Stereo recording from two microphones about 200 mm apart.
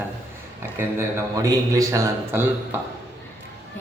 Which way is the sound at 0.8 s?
15° right (ahead or behind).